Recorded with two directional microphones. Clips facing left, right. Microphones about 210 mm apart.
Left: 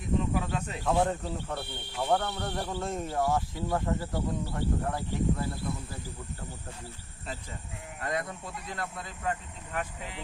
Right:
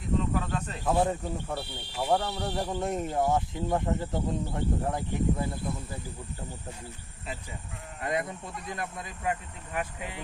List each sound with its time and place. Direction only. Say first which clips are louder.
0.2 s snake: even; 10° left (ahead or behind)
0.9 s speech: right 1 dB; 10° right (ahead or behind)
8.0 s speech: right 2 dB; 20° right (ahead or behind)